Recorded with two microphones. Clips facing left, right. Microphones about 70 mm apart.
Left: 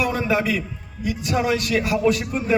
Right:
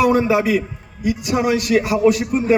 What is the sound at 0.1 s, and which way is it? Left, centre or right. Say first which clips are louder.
A man's voice: right 6 dB; centre.